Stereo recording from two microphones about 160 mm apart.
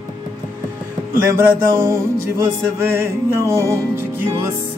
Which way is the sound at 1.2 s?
15° right (ahead or behind).